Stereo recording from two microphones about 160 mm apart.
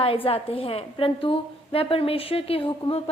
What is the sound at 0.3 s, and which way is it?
A woman's voice, 35° left (ahead or behind).